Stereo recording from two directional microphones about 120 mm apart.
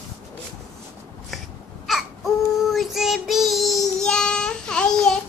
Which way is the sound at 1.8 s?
Centre (ahead or behind).